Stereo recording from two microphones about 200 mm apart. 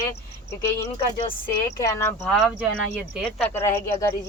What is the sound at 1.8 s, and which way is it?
Speech, 15° left (ahead or behind).